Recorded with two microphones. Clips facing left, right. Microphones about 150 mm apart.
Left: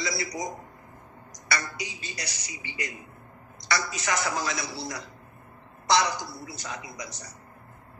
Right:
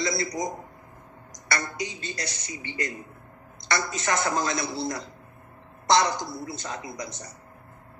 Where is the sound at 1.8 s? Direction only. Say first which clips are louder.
Right 5 dB; 10° left (ahead or behind).